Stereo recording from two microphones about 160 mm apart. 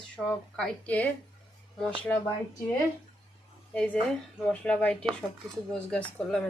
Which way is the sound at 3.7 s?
5° left (ahead or behind).